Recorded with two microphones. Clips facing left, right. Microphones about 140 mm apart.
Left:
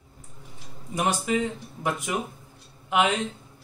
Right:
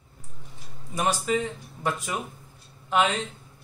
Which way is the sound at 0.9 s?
15° left (ahead or behind).